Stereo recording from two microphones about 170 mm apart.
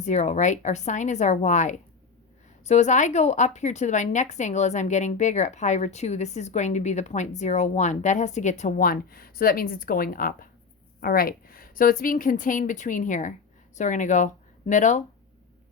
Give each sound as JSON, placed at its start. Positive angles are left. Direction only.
{"t": 0.0, "sound": "a woman's voice", "side_deg": 40}